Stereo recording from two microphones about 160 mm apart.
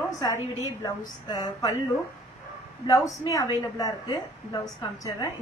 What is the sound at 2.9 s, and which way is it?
A woman's voice, 20° left (ahead or behind).